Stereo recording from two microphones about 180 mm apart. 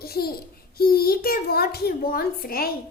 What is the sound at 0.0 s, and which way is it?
A child's voice, 60° left (ahead or behind).